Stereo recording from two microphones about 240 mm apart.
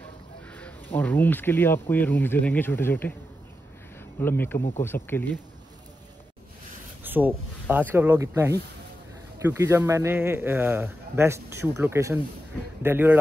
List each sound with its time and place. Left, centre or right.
0.5 s speech: centre
4.2 s speech: centre
4.6 s speech: left
4.8 s speech: centre
7.0 s speech: centre